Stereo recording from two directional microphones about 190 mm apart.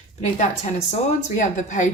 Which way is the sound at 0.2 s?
40° left (ahead or behind).